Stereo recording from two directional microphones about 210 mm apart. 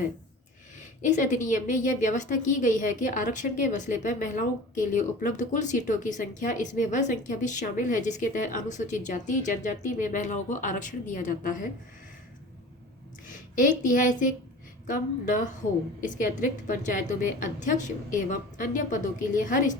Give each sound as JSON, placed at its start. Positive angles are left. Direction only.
{"t": 0.8, "sound": "a woman's voice", "side_deg": 35}
{"t": 13.2, "sound": "a woman's voice", "side_deg": 40}